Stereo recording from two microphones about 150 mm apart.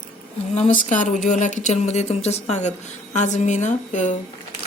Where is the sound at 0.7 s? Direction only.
60° left (ahead or behind).